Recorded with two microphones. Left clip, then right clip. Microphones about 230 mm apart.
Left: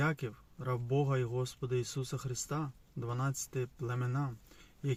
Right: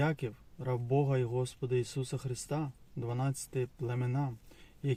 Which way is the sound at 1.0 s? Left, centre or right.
Left.